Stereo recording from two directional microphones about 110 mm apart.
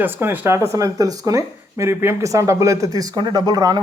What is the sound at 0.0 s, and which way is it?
Speech, 20° right (ahead or behind).